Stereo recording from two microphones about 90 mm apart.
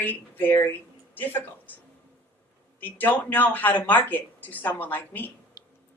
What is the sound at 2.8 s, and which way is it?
Speech, 20° left (ahead or behind).